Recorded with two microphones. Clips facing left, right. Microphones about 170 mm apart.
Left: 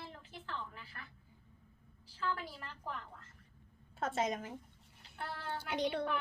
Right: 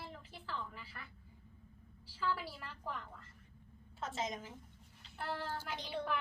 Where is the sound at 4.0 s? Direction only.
55° left (ahead or behind).